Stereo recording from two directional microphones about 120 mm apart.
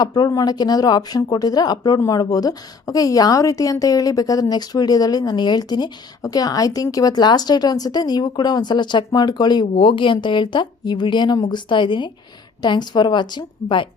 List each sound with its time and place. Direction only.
0.0 s a woman's voice: 30° left (ahead or behind)